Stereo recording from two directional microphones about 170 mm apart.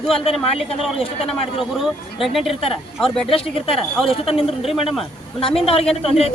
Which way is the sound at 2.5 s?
35° left (ahead or behind).